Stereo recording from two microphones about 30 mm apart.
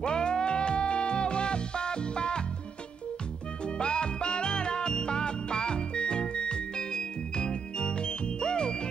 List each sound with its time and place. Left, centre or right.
0.0 s music: left
3.6 s music: left